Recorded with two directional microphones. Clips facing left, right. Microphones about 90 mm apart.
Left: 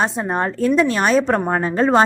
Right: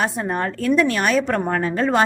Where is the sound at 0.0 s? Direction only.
25° left (ahead or behind).